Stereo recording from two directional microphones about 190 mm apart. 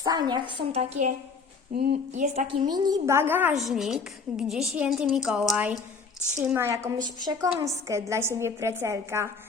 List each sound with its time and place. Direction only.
0.0 s a woman's voice: 20° right (ahead or behind)
0.8 s a woman's voice: 40° right (ahead or behind)
2.6 s a woman's voice: 20° right (ahead or behind)